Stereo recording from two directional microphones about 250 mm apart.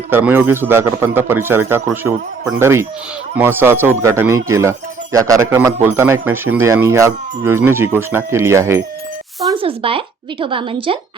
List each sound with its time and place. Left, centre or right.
0.1 s a man's voice: centre